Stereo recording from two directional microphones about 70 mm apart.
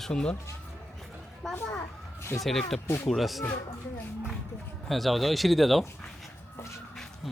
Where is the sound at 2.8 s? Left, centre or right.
Left.